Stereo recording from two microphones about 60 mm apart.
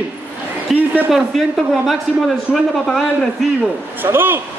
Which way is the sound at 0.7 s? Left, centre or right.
Centre.